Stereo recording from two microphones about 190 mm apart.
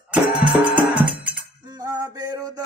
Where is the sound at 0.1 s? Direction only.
5° right (ahead or behind).